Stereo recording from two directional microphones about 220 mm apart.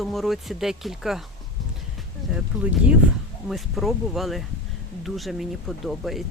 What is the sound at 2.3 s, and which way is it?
Speech, 5° right (ahead or behind).